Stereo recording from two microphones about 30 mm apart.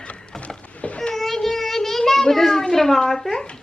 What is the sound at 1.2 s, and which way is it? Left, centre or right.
Child singing, centre.